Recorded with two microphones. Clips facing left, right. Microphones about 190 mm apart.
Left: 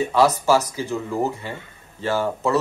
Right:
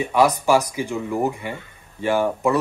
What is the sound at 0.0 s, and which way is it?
Speech, 15° right (ahead or behind).